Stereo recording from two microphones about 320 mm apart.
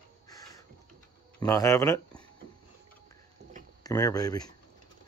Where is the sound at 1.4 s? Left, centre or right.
Centre.